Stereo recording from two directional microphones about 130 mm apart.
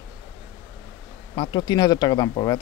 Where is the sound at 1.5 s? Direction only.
35° left (ahead or behind).